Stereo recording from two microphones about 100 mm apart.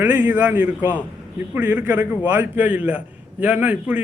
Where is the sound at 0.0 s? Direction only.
20° right (ahead or behind).